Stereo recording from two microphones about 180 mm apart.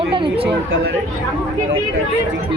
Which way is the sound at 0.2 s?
30° right (ahead or behind).